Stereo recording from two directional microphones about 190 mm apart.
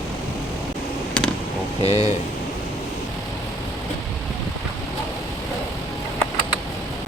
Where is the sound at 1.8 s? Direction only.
35° left (ahead or behind).